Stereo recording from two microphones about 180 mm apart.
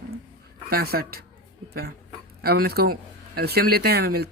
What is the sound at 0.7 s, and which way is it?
Speech, 60° right (ahead or behind).